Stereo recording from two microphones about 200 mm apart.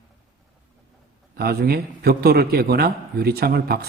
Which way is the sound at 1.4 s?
50° right (ahead or behind).